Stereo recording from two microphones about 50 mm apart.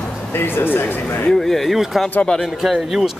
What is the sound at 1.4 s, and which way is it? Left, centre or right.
Speech, centre.